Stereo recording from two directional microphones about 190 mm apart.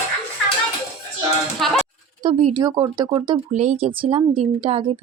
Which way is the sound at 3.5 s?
40° right (ahead or behind).